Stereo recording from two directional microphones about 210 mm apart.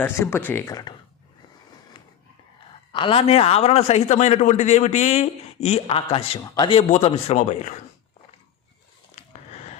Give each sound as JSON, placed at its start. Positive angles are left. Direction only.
{"t": 0.0, "sound": "speech", "side_deg": 10}
{"t": 2.9, "sound": "a man's voice", "side_deg": 25}
{"t": 9.5, "sound": "a sound", "side_deg": 30}